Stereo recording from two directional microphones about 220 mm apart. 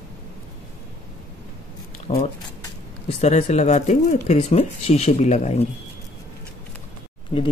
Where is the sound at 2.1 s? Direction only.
25° left (ahead or behind).